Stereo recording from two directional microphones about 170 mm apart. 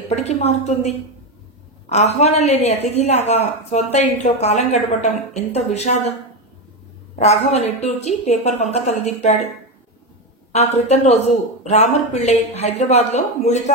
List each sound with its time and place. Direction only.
0.1 s a woman's voice: 40° left (ahead or behind)
7.2 s a man's voice: 40° left (ahead or behind)
10.5 s a man's voice: 40° left (ahead or behind)